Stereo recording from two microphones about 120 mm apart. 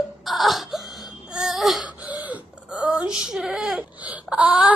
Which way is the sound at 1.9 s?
10° right (ahead or behind).